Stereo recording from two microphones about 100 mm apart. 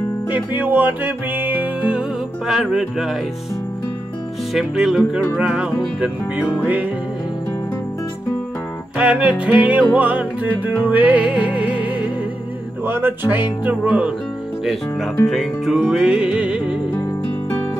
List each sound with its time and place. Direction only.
0.6 s music: 20° right (ahead or behind)
4.6 s music: 5° right (ahead or behind)
8.9 s music: 10° right (ahead or behind)
14.6 s speech: centre (ahead or behind)
15.2 s music: centre (ahead or behind)